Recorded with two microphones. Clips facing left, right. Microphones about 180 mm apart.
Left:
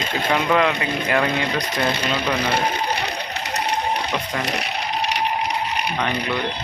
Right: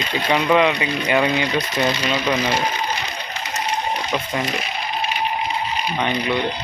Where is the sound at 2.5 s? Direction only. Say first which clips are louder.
Even; 60° left (ahead or behind).